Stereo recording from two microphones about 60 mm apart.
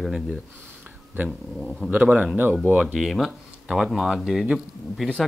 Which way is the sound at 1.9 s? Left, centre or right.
Right.